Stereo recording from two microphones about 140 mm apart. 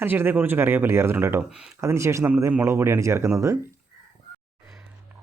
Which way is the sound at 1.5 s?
5° right (ahead or behind).